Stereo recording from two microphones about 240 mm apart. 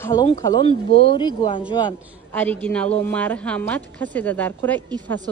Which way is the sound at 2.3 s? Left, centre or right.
Centre.